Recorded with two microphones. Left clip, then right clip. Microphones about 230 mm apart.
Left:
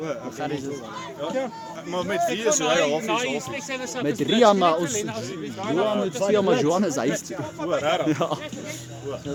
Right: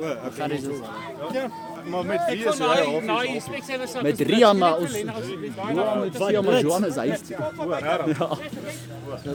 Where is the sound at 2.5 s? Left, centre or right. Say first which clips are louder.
Even; centre.